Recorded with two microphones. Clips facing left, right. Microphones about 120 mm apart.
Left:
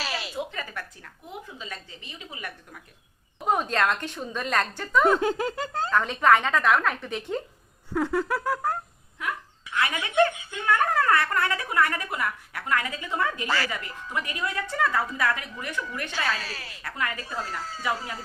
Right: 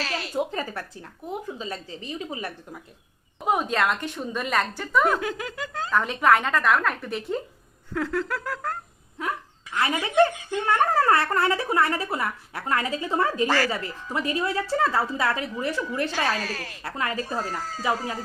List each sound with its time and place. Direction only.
0.0 s a sound: 10° left (ahead or behind)
0.3 s a child's voice: 35° right (ahead or behind)
3.4 s a woman's voice: 10° right (ahead or behind)
5.0 s giggle: 30° left (ahead or behind)
5.9 s speech: 5° right (ahead or behind)
8.0 s a sound: 10° left (ahead or behind)
9.1 s a child's voice: 35° right (ahead or behind)
16.8 s a child's voice: 30° right (ahead or behind)